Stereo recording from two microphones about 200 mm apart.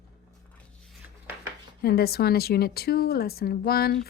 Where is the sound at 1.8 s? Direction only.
50° left (ahead or behind).